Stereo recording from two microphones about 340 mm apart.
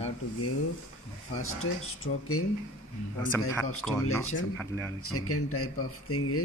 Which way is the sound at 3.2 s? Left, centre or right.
Centre.